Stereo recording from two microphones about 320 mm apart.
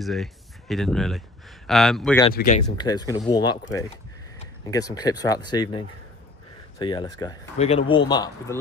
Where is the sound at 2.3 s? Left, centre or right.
Left.